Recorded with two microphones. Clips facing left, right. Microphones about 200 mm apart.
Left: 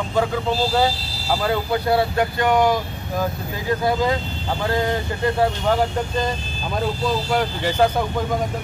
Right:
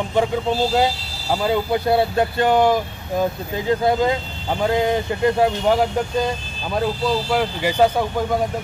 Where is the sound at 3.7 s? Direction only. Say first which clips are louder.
Right 3 dB; 25° right (ahead or behind).